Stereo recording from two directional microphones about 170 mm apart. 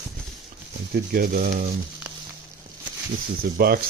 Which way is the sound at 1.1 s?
60° right (ahead or behind).